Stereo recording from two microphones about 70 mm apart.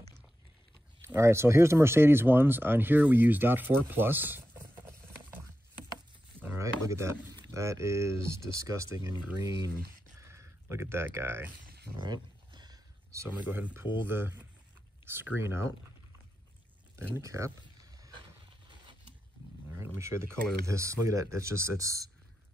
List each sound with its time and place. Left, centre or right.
1.0 s speech: right
6.6 s a sound: right
7.5 s speech: right
10.1 s a sound: right
12.0 s a sound: right
13.1 s speech: right
13.5 s speech: right
17.2 s speech: right
19.8 s speech: right